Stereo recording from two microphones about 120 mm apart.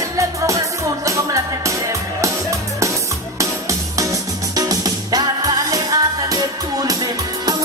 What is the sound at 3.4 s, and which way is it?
Music, 25° right (ahead or behind).